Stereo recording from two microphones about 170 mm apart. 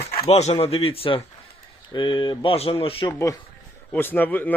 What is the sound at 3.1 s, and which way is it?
Speech, 20° left (ahead or behind).